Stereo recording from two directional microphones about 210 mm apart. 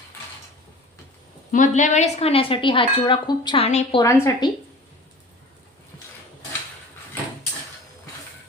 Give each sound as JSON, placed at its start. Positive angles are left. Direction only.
{"t": 1.5, "sound": "speech", "side_deg": 40}
{"t": 4.0, "sound": "a woman's voice", "side_deg": 15}